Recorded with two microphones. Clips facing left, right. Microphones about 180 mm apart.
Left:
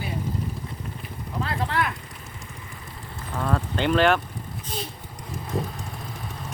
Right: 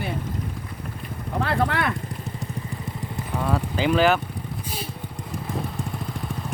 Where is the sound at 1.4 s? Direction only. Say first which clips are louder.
Right 3 dB; 70° right (ahead or behind).